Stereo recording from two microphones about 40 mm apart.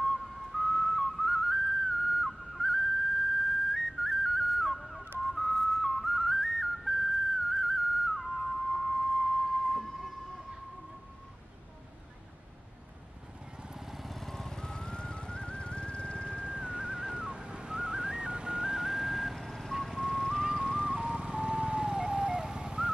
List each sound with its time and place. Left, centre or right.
0.0 s whistle: centre
13.7 s vehicle: centre; by 16.4 s left
16.6 s whistling: right; by 20.2 s centre
20.5 s music: centre
20.8 s vehicle: centre